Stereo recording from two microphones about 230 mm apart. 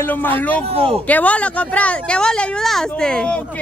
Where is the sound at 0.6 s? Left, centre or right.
Right.